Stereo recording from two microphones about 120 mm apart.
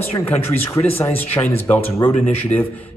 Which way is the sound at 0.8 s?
15° left (ahead or behind).